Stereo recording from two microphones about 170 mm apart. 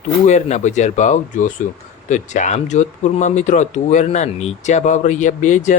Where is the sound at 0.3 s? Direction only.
40° left (ahead or behind).